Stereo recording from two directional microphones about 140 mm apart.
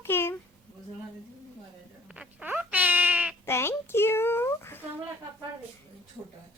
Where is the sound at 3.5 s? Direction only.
15° left (ahead or behind).